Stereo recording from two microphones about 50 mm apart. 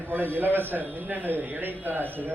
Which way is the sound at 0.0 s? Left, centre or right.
Right.